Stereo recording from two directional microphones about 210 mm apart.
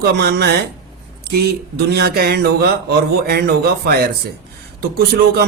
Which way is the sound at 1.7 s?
50° right (ahead or behind).